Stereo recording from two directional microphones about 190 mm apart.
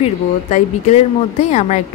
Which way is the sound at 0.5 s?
35° left (ahead or behind).